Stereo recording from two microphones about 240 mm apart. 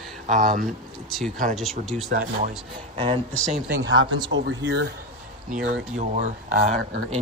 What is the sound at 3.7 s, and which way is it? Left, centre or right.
Speech, right.